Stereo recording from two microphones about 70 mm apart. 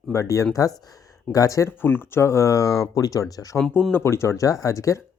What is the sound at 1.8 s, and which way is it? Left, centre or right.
Speech, left.